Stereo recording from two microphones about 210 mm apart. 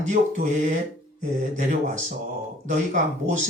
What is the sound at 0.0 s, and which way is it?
Speech, 35° right (ahead or behind).